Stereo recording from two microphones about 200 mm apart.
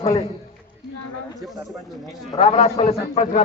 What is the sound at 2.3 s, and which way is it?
Speech, 35° left (ahead or behind).